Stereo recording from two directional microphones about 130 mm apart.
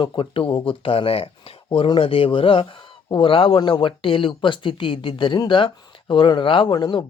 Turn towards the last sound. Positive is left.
turn(degrees=35)  # may be behind; listen again after turning